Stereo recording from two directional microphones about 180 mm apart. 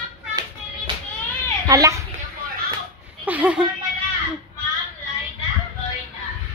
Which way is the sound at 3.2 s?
10° right (ahead or behind).